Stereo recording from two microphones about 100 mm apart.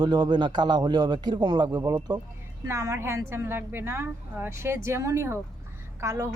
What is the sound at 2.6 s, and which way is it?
A woman's voice, 30° right (ahead or behind).